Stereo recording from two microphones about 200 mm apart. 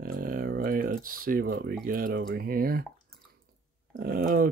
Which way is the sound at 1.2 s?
45° right (ahead or behind).